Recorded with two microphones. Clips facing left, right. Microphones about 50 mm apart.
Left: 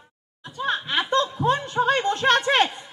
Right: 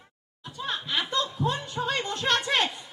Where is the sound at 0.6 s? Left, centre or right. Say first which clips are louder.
Left 6 dB; left.